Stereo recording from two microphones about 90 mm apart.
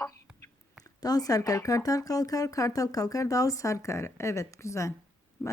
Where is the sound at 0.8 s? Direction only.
45° left (ahead or behind).